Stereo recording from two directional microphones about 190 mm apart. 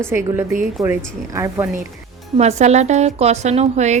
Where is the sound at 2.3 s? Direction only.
35° right (ahead or behind).